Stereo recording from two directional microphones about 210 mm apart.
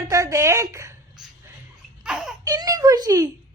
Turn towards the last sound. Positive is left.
turn(degrees=-15)  # may be behind; listen again after turning